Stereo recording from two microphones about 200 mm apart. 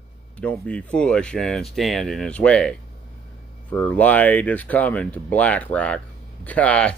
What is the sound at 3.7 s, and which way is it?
Speech, 5° left (ahead or behind).